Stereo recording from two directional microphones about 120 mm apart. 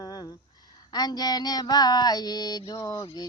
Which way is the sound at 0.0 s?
30° left (ahead or behind).